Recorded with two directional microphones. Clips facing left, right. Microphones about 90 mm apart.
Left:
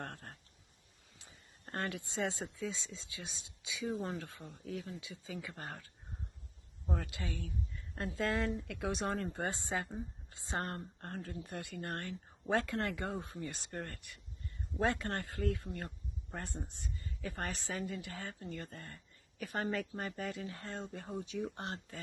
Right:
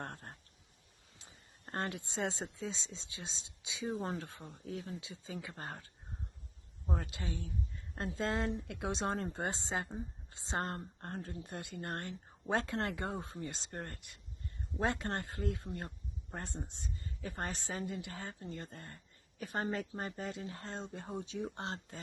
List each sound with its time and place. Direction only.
0.0 s a sound: 30° right (ahead or behind)
1.7 s a woman's voice: 25° right (ahead or behind)
6.9 s a woman's voice: 30° right (ahead or behind)